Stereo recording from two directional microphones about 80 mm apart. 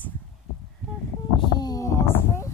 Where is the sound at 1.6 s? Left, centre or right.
Left.